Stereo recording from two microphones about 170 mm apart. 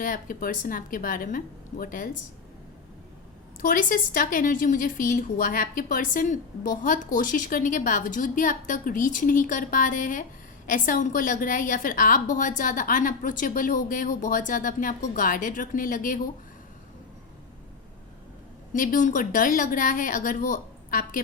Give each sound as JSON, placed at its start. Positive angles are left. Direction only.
{"t": 0.0, "sound": "a woman's voice", "side_deg": 55}
{"t": 3.6, "sound": "a woman's voice", "side_deg": 55}
{"t": 18.7, "sound": "a woman's voice", "side_deg": 55}